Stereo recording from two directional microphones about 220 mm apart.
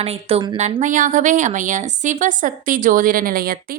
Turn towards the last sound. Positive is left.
turn(degrees=-40)  # may be behind; listen again after turning